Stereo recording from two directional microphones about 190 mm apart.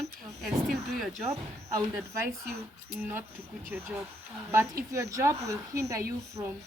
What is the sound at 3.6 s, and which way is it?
A woman's voice, 10° right (ahead or behind).